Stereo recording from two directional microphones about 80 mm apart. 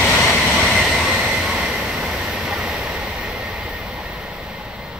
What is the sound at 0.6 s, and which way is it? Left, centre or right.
Train, centre.